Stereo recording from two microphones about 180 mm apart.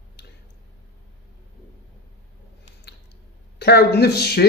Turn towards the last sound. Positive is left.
turn(degrees=65)  # may be behind; listen again after turning